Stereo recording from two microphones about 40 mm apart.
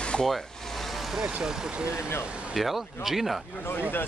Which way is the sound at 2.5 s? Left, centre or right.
Centre.